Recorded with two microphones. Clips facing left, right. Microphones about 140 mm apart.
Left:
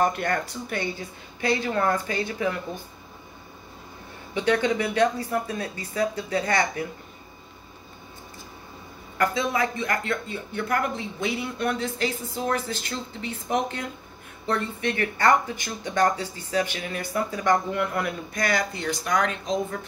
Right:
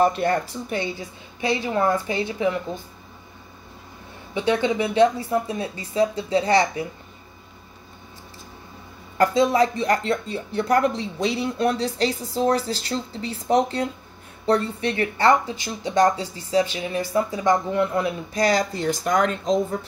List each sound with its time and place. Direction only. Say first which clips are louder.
0.2 s a woman's voice: right 4 dB; 25° right (ahead or behind)
4.3 s a woman's voice: right 1 dB; 20° right (ahead or behind)
9.2 s a woman's voice: right 6 dB; 35° right (ahead or behind)
18.4 s speech: right 6 dB; 40° right (ahead or behind)